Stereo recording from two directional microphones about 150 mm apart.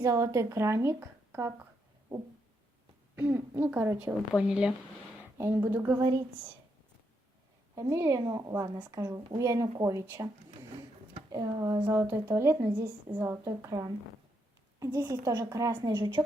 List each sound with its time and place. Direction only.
0.0 s a woman's voice: 20° right (ahead or behind)
3.2 s speech: 15° right (ahead or behind)
7.8 s a woman's voice: 20° right (ahead or behind)
11.3 s a woman's voice: 25° right (ahead or behind)